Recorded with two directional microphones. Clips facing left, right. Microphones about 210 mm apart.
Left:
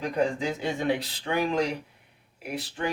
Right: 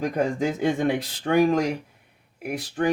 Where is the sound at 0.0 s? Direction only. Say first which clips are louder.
Right 3 dB; 45° right (ahead or behind).